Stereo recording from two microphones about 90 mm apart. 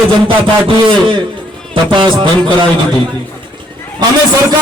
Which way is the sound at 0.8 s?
60° right (ahead or behind).